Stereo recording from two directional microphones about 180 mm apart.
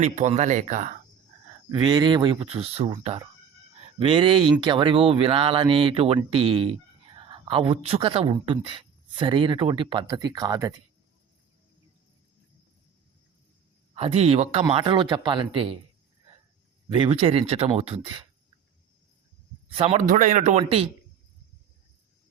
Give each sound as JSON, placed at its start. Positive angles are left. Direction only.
{"t": 0.0, "sound": "speech", "side_deg": -40}
{"t": 1.7, "sound": "speech", "side_deg": -25}
{"t": 13.9, "sound": "speech", "side_deg": -35}
{"t": 16.9, "sound": "speech", "side_deg": -30}
{"t": 19.7, "sound": "speech", "side_deg": -35}
{"t": 20.0, "sound": "speech", "side_deg": -45}